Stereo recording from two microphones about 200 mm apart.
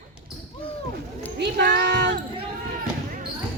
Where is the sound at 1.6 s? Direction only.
55° right (ahead or behind).